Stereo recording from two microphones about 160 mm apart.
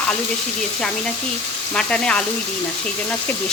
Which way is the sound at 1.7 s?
5° left (ahead or behind).